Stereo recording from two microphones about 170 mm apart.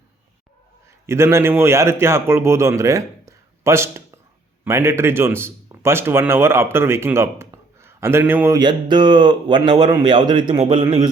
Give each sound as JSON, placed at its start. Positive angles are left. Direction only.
{"t": 1.0, "sound": "a man's voice", "side_deg": -15}
{"t": 8.5, "sound": "speech", "side_deg": -25}